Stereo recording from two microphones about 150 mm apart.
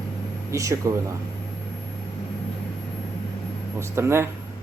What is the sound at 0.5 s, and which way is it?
Speech, 20° right (ahead or behind).